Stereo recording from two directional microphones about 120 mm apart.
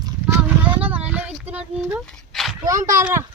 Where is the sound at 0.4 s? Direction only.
15° right (ahead or behind).